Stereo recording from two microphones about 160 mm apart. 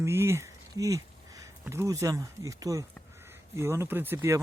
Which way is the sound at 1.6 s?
15° right (ahead or behind).